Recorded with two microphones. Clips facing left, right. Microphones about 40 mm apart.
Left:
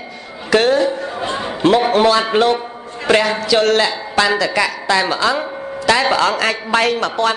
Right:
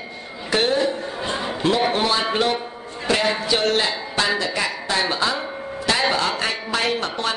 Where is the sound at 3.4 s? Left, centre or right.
Left.